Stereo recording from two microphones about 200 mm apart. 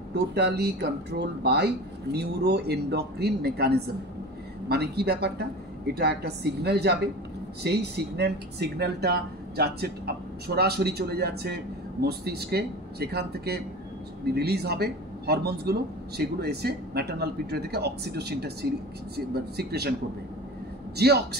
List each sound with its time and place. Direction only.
0.1 s speech: 55° right (ahead or behind)